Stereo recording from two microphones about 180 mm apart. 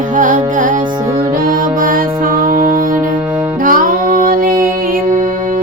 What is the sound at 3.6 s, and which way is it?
Music, 50° right (ahead or behind).